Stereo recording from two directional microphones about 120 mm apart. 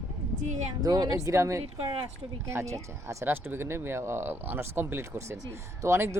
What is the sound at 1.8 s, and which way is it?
Speech, 40° right (ahead or behind).